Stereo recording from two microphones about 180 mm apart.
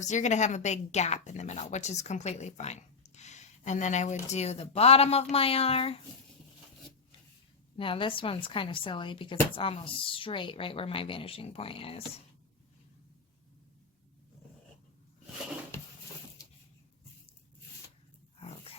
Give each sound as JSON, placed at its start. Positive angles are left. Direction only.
{"t": 0.0, "sound": "a woman's voice", "side_deg": 40}
{"t": 7.8, "sound": "speech", "side_deg": 30}